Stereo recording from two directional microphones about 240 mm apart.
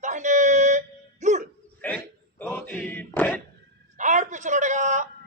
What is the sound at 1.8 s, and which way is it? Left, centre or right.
Speech, centre.